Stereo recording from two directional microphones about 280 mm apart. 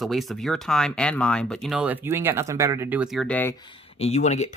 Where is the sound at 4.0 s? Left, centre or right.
Left.